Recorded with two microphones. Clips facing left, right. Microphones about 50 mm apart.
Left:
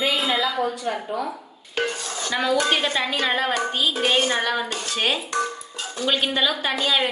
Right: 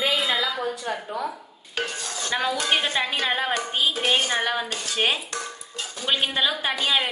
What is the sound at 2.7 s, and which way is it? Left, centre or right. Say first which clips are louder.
Speech: left 1 dB; centre.